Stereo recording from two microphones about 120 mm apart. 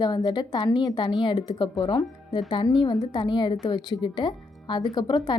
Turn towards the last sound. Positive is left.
turn(degrees=40)  # may be behind; listen again after turning